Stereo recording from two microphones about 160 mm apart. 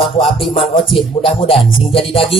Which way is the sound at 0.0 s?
35° left (ahead or behind).